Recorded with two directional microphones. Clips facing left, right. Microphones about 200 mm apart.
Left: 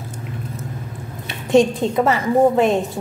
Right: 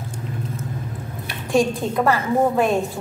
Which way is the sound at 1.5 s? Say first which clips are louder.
Left 4 dB; 20° left (ahead or behind).